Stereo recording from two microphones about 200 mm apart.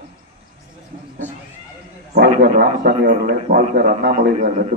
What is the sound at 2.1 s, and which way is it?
A man's voice, 50° right (ahead or behind).